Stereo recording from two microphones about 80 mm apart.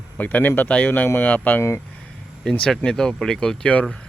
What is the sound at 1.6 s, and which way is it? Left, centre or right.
Speech, left.